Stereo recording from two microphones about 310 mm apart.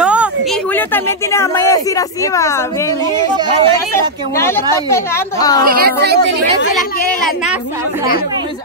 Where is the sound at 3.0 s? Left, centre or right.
Centre.